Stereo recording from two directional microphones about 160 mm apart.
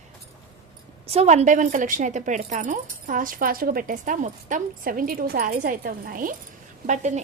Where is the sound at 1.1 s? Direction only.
40° right (ahead or behind); by 6.3 s 60° right (ahead or behind).